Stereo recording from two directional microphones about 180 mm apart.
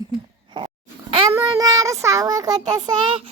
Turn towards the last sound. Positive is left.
turn(degrees=-25)  # may be behind; listen again after turning